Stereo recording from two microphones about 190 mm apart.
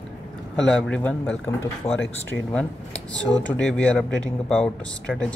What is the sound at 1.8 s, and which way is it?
Speech, 30° left (ahead or behind).